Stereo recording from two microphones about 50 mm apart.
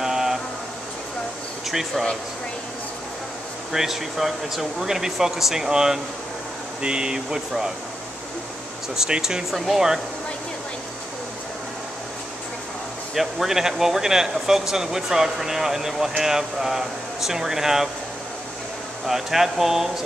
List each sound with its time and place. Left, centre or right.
0.0 s a sound: centre
1.7 s speech: centre
3.7 s speech: centre
8.9 s speech: centre
13.1 s speech: centre
19.0 s speech: centre